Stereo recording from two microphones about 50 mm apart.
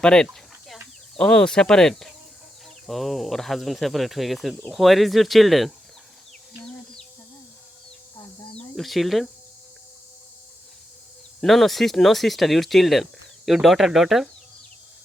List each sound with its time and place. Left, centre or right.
0.0 s speech: centre
8.7 s speech: centre
11.4 s speech: centre